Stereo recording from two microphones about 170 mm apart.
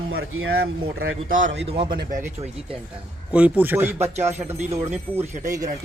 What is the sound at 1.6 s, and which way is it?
Speech, 30° right (ahead or behind).